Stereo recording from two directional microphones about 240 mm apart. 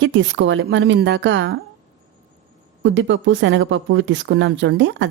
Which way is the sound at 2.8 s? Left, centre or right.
Right.